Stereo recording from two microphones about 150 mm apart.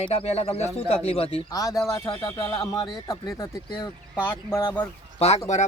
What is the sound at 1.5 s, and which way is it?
Speech, 25° left (ahead or behind).